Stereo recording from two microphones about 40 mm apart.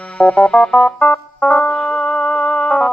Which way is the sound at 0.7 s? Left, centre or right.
Centre.